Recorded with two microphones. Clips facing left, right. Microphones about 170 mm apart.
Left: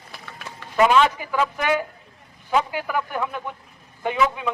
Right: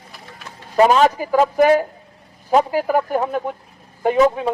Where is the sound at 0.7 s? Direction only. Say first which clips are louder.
Right 4 dB; 40° right (ahead or behind).